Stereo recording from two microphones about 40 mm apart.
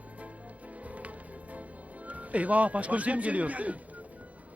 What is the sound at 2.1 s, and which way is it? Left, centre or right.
A man's voice, right.